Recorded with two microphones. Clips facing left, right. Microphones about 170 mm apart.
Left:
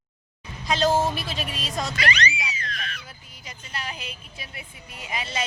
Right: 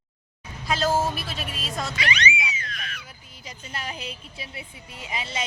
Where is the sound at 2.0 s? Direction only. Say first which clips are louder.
Even; 35° left (ahead or behind).